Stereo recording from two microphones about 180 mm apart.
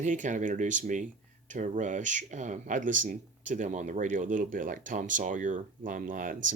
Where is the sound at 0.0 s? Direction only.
45° right (ahead or behind).